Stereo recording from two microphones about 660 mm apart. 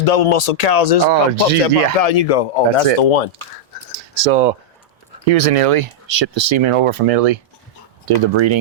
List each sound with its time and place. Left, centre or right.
0.0 s speech: left
1.0 s speech: right
1.6 s speech: left
5.2 s speech: right
8.0 s speech: right